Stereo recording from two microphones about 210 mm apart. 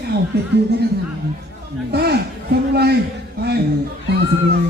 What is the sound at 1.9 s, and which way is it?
Speech, 50° right (ahead or behind).